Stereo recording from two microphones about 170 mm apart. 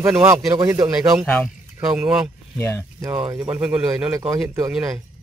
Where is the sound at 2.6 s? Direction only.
15° left (ahead or behind).